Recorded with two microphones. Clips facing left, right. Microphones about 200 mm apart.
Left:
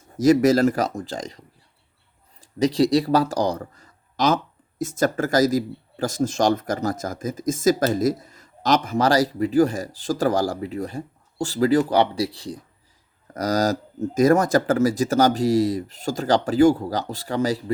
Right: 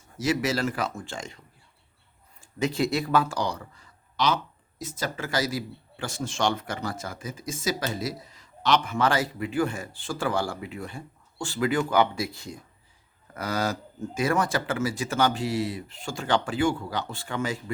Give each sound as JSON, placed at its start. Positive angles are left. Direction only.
{"t": 0.2, "sound": "speech", "side_deg": 40}